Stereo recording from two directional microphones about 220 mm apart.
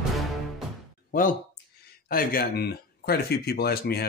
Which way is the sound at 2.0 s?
40° left (ahead or behind).